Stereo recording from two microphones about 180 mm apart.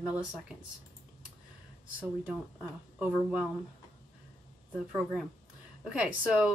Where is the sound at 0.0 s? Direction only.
10° right (ahead or behind).